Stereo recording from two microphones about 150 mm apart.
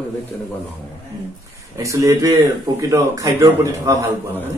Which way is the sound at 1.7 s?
20° right (ahead or behind).